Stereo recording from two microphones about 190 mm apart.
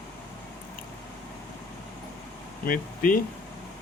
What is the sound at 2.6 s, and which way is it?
Speech, 50° left (ahead or behind).